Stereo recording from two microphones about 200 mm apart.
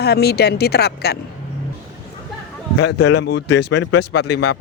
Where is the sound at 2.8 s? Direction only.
60° left (ahead or behind).